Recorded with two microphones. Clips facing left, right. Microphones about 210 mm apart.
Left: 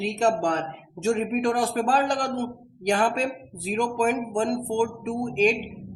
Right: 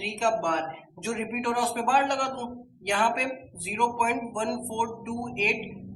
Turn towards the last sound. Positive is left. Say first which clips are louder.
# left 8 dB
turn(degrees=40)  # may be behind; listen again after turning